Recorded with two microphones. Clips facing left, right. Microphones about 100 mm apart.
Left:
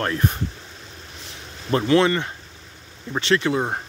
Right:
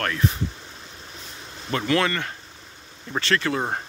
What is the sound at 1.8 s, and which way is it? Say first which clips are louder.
Speech: left 5 dB; 20° left (ahead or behind).